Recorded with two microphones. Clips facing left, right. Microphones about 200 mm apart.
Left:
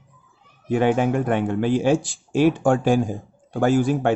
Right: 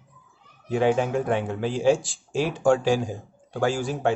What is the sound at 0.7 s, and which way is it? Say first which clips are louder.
Speech: left 3 dB; 60° left (ahead or behind).